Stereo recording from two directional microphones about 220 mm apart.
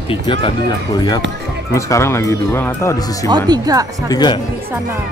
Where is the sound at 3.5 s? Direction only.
15° right (ahead or behind).